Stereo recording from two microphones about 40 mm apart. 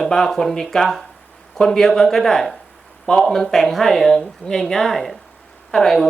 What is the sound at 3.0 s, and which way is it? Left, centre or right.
Speech, centre.